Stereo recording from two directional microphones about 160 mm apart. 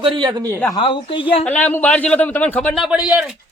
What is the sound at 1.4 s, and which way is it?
Speech, 10° left (ahead or behind).